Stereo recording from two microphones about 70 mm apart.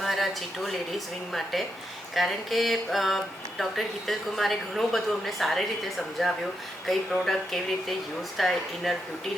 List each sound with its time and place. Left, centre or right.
0.0 s a woman's voice: centre
6.8 s a woman's voice: centre